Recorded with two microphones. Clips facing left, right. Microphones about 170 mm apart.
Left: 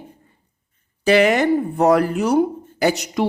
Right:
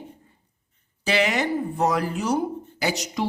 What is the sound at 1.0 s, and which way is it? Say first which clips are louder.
Speech: left 8 dB; 55° left (ahead or behind).